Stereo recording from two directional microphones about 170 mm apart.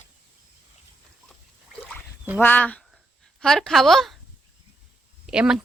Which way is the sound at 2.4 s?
10° left (ahead or behind).